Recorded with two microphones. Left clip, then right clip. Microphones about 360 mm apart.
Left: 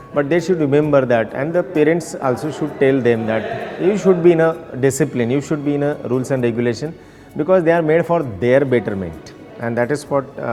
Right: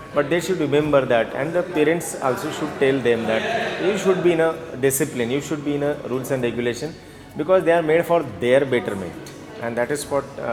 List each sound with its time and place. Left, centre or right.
0.2 s a man's voice: left